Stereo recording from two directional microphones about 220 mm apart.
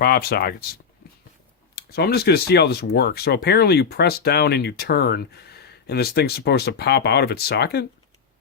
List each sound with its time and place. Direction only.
0.0 s speech: 45° left (ahead or behind)